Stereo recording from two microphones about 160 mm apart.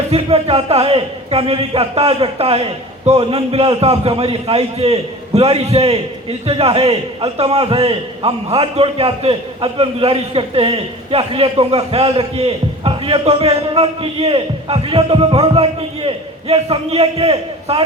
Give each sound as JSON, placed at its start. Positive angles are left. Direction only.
{"t": 0.1, "sound": "a man's voice", "side_deg": -35}